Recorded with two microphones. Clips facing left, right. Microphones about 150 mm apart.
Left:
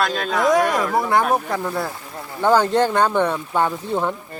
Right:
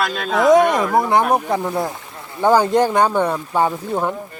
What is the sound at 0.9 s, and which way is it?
Speech, 20° right (ahead or behind).